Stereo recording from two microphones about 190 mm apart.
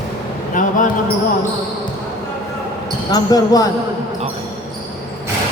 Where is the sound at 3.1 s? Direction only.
20° left (ahead or behind).